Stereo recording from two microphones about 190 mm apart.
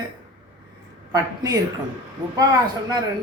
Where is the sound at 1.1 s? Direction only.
20° right (ahead or behind).